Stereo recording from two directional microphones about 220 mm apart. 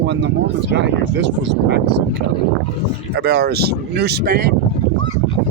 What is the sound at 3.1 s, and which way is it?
Speech, 50° right (ahead or behind).